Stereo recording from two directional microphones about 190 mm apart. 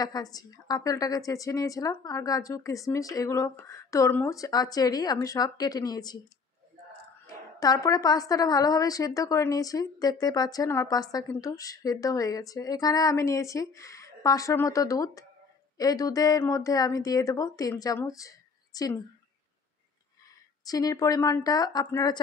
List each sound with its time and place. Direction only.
0.0 s a woman's voice: 20° left (ahead or behind)
7.6 s a woman's voice: 20° left (ahead or behind)
20.6 s a woman's voice: 20° left (ahead or behind)